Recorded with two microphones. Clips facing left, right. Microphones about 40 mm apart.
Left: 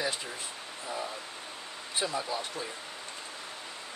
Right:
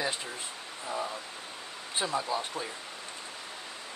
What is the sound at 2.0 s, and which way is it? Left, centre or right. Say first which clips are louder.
Speech: right 2 dB; centre.